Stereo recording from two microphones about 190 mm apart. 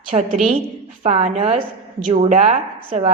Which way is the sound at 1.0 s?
35° right (ahead or behind).